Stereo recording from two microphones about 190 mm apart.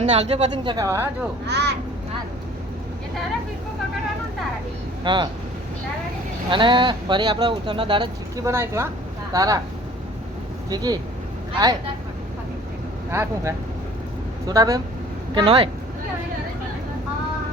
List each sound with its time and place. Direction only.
0.0 s speech: 35° right (ahead or behind); by 1.3 s 10° right (ahead or behind)
1.5 s speech: 60° right (ahead or behind)
5.0 s speech: 25° right (ahead or behind)
6.5 s speech: 25° right (ahead or behind)
10.7 s speech: 20° right (ahead or behind)
13.1 s speech: 15° right (ahead or behind)